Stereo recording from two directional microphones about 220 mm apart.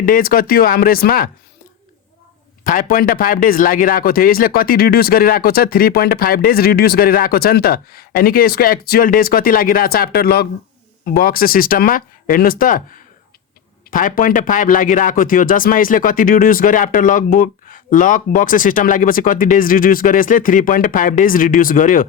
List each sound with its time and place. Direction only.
0.0 s speech: 40° left (ahead or behind)
2.6 s speech: 40° left (ahead or behind)